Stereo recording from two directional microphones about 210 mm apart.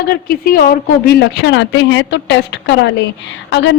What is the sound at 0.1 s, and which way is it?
A woman's voice, 45° left (ahead or behind).